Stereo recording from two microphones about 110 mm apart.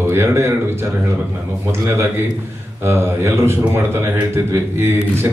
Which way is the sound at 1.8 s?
25° right (ahead or behind).